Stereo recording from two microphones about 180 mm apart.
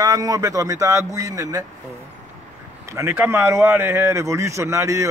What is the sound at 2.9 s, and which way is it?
A man's voice, 10° right (ahead or behind).